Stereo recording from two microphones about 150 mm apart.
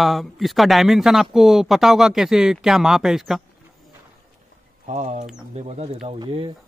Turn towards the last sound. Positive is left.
turn(degrees=-35)  # may be behind; listen again after turning